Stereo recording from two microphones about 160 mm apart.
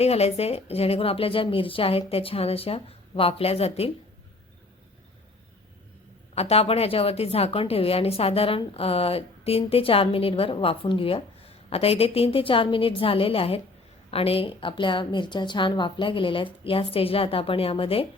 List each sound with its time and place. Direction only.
0.0 s a woman's voice: 40° left (ahead or behind)
6.3 s a woman's voice: 40° left (ahead or behind)